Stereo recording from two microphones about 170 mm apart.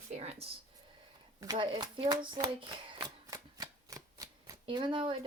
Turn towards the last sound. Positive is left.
turn(degrees=-30)  # may be behind; listen again after turning